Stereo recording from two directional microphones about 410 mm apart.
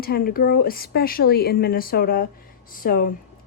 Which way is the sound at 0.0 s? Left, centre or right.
Left.